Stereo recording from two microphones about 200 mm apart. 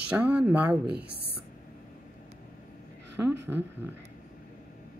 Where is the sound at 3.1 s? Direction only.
10° right (ahead or behind).